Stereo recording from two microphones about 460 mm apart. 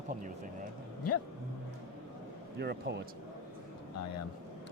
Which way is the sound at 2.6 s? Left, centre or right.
Right.